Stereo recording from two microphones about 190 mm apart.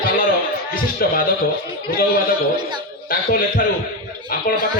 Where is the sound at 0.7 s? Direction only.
50° left (ahead or behind).